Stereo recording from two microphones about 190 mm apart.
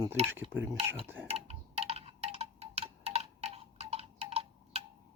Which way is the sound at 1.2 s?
35° right (ahead or behind).